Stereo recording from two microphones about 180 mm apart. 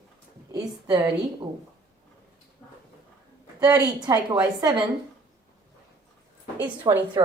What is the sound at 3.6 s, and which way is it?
Speech, 20° right (ahead or behind).